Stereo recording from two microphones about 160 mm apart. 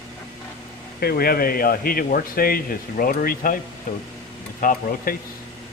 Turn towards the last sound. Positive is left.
turn(degrees=65)  # may be behind; listen again after turning